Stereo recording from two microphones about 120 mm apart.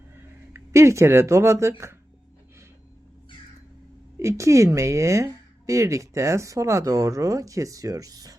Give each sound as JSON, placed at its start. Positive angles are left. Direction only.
{"t": 0.5, "sound": "speech", "side_deg": -25}
{"t": 4.2, "sound": "speech", "side_deg": -25}